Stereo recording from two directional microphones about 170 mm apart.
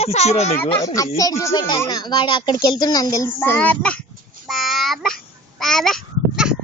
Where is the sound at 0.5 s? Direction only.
15° left (ahead or behind).